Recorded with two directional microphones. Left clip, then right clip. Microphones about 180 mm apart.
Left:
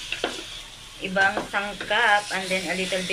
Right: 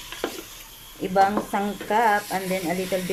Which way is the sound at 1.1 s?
30° right (ahead or behind).